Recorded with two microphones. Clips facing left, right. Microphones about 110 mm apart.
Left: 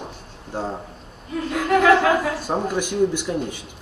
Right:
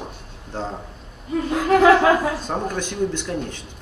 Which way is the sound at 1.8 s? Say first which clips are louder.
Right 2 dB; 25° right (ahead or behind).